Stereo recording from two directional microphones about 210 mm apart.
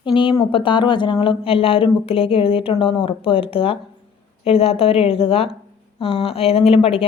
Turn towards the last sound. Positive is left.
turn(degrees=25)  # may be behind; listen again after turning